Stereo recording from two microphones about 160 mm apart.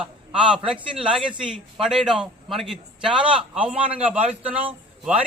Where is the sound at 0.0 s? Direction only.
5° right (ahead or behind).